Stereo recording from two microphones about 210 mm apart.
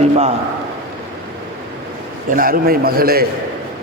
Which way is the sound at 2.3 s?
45° right (ahead or behind).